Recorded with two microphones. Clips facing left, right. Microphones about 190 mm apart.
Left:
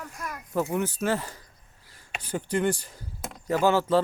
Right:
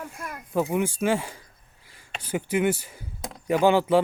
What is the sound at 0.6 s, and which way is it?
Speech, 15° right (ahead or behind).